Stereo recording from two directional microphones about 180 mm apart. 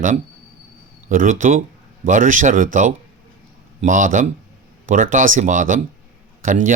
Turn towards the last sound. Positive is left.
turn(degrees=-45)  # may be behind; listen again after turning